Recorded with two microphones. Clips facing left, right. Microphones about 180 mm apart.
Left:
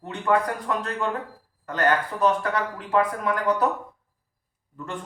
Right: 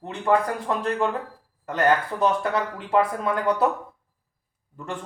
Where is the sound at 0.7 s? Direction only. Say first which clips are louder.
Right 1 dB; 30° right (ahead or behind).